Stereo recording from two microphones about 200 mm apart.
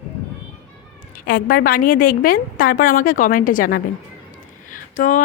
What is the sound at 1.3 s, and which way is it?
A woman's voice, 45° left (ahead or behind).